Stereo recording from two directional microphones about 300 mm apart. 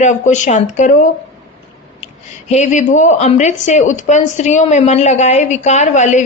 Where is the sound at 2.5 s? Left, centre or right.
Left.